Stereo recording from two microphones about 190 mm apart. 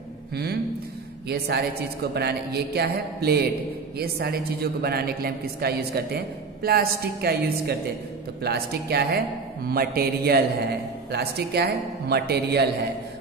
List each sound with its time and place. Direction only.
1.3 s a man's voice: 55° right (ahead or behind)